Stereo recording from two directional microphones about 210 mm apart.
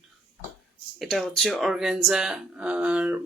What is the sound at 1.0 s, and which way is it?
Speech, centre (ahead or behind).